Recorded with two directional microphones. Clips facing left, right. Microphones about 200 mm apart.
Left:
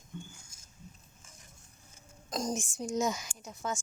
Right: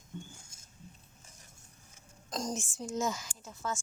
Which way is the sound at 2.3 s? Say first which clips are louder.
Left 2 dB; 10° left (ahead or behind).